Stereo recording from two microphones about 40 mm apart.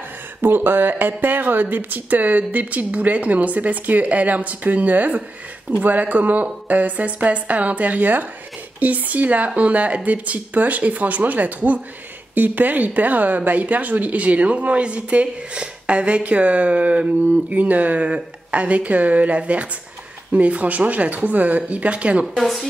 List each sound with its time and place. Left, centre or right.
0.4 s speech: right